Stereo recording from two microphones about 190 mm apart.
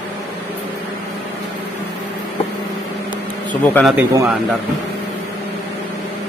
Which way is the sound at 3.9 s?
15° right (ahead or behind).